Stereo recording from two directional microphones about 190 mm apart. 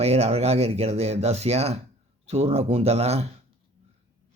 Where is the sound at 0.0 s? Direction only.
35° right (ahead or behind).